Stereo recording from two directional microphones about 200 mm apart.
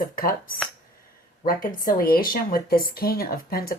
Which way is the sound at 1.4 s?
45° left (ahead or behind).